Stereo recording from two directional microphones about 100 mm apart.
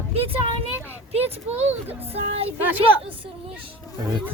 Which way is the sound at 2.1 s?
80° right.